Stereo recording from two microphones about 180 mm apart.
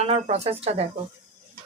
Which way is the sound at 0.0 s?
35° right (ahead or behind).